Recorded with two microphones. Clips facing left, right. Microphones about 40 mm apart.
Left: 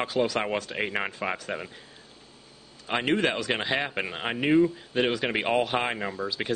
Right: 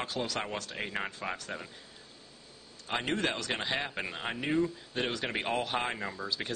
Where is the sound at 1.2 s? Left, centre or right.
Left.